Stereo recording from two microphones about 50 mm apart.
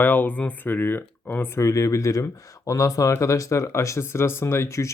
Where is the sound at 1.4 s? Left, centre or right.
Left.